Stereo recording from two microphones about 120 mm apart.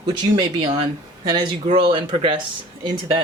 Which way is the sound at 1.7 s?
45° right (ahead or behind).